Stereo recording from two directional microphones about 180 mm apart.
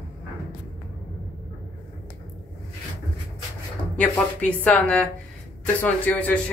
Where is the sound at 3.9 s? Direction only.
5° left (ahead or behind).